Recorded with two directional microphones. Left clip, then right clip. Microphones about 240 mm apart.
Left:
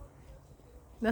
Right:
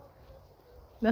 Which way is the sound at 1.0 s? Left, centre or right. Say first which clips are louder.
Right 3 dB; centre.